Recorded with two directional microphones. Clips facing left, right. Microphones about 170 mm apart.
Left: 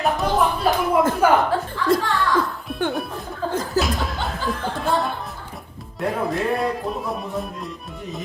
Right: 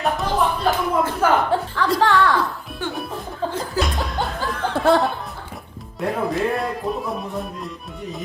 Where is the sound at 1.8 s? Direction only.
80° right.